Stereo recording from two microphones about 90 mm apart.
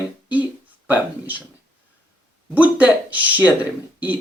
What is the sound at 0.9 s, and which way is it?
Speech, 20° right (ahead or behind).